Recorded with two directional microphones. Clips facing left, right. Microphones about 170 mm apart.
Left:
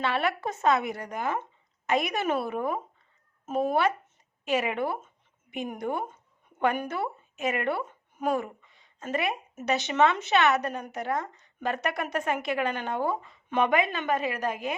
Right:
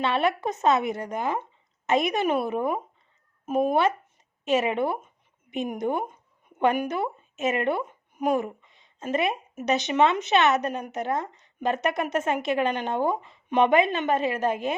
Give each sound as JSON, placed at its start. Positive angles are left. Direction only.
{"t": 0.0, "sound": "speech", "side_deg": -20}
{"t": 4.4, "sound": "a sound", "side_deg": -25}
{"t": 5.5, "sound": "a woman's voice", "side_deg": -20}